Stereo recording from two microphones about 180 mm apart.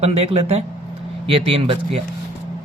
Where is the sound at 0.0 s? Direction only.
35° right (ahead or behind).